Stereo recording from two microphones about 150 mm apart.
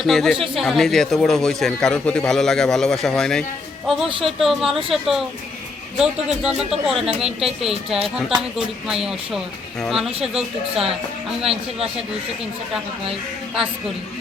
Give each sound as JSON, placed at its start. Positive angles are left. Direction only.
{"t": 0.0, "sound": "a man's voice", "side_deg": 0}
{"t": 7.9, "sound": "a man's voice", "side_deg": -40}
{"t": 8.4, "sound": "a man's voice", "side_deg": -5}
{"t": 11.4, "sound": "a man's voice", "side_deg": -40}